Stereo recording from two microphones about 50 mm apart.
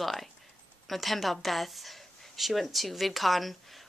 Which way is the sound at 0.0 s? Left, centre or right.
Centre.